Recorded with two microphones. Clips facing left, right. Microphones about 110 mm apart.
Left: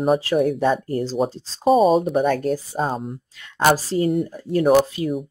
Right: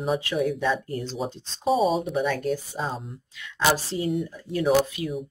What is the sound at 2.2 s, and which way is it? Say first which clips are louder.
A woman's voice: left 5 dB; 45° left (ahead or behind).